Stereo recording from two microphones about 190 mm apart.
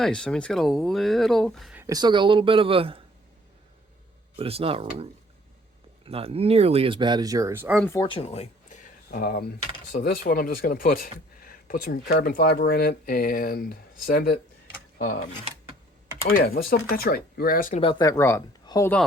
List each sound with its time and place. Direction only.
0.0 s speech: 5° left (ahead or behind)
1.8 s speech: 20° right (ahead or behind)
4.4 s speech: 30° right (ahead or behind)
6.1 s speech: 30° right (ahead or behind); by 7.8 s 10° right (ahead or behind)
8.0 s a sound: 30° left (ahead or behind); by 9.4 s 50° left (ahead or behind)
9.9 s speech: 55° left (ahead or behind)
16.2 s speech: 55° left (ahead or behind)
17.7 s speech: 30° left (ahead or behind)
18.0 s speech: 15° left (ahead or behind)